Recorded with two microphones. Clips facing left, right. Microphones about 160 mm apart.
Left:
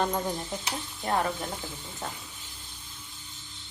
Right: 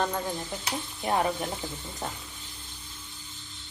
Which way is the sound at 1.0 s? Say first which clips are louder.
Right 2 dB; 15° right (ahead or behind).